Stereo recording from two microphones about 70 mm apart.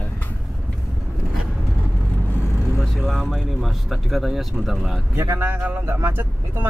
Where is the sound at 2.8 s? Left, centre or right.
Centre.